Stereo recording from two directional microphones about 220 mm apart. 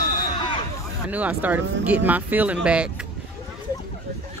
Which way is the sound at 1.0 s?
5° right (ahead or behind).